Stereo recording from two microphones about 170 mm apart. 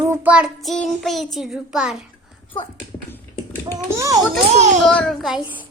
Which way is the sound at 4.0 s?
20° right (ahead or behind).